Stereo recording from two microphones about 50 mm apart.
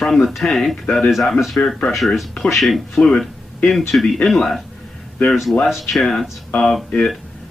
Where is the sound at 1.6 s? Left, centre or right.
Left.